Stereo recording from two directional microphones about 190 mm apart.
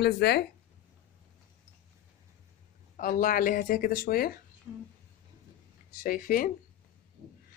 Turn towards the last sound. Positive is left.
turn(degrees=45)  # may be behind; listen again after turning